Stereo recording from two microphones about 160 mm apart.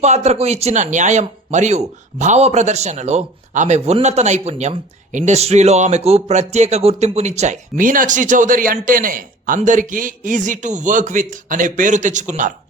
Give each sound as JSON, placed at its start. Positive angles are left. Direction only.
{"t": 0.0, "sound": "a man's voice", "side_deg": -45}